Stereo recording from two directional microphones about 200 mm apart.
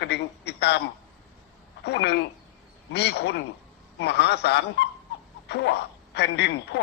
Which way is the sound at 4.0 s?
55° left (ahead or behind).